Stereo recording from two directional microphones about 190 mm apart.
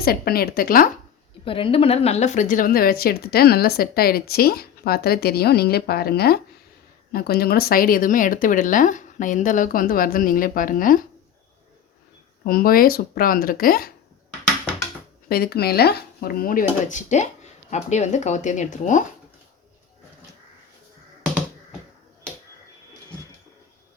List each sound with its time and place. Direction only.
0.0 s speech: 50° left (ahead or behind)
1.5 s speech: 30° left (ahead or behind); by 11.0 s 45° left (ahead or behind)
12.5 s speech: 50° left (ahead or behind)
15.3 s speech: 55° left (ahead or behind)